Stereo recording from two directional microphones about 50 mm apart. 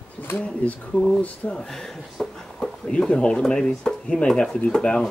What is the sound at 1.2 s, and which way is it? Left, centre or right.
Speech, left.